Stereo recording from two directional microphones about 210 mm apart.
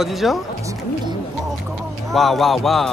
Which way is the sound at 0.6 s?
15° right (ahead or behind).